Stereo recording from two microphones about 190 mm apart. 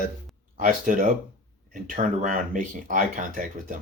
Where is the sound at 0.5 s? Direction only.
45° right (ahead or behind).